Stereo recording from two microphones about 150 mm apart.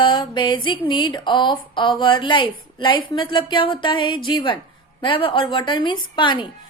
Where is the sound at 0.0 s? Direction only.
30° left (ahead or behind).